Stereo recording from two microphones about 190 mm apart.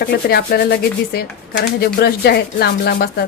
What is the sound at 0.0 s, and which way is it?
Speech, 55° left (ahead or behind).